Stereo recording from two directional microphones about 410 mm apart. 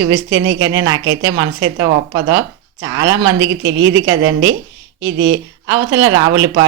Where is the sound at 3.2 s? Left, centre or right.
Right.